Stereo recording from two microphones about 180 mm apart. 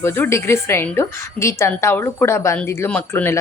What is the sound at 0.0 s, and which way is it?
Speech, 15° left (ahead or behind).